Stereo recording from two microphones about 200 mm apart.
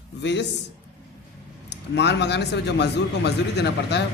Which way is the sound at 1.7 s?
60° left (ahead or behind).